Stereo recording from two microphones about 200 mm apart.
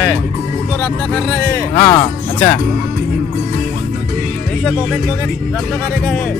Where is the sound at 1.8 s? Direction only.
20° left (ahead or behind).